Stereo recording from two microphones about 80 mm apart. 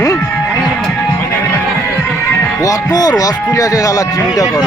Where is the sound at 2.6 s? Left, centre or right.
Left.